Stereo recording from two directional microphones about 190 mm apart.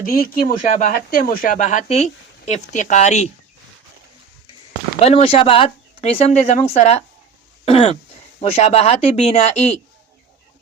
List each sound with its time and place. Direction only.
0.0 s speech: 50° left (ahead or behind)
4.9 s speech: 30° left (ahead or behind)
7.6 s throat clearing: 30° left (ahead or behind)
8.4 s speech: 35° left (ahead or behind)